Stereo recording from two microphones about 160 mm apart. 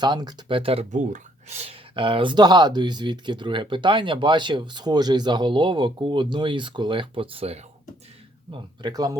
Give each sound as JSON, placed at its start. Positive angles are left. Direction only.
{"t": 0.0, "sound": "speech", "side_deg": -25}
{"t": 0.9, "sound": "speech", "side_deg": -50}
{"t": 8.5, "sound": "speech", "side_deg": -25}